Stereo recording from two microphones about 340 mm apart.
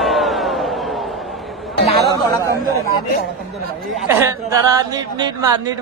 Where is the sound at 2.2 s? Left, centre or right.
Centre.